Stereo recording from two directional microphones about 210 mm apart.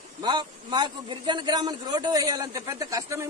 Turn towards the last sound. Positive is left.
turn(degrees=-15)  # may be behind; listen again after turning